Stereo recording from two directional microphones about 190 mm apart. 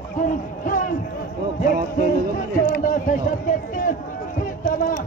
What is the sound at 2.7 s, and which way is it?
Run, 45° left (ahead or behind).